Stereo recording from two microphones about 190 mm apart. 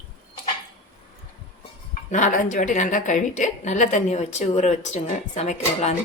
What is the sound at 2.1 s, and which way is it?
A woman's voice, 40° left (ahead or behind).